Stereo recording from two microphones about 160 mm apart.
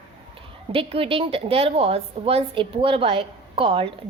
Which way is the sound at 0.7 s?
35° right (ahead or behind).